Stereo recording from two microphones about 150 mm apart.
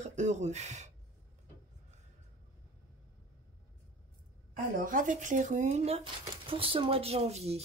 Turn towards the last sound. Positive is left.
turn(degrees=-45)  # may be behind; listen again after turning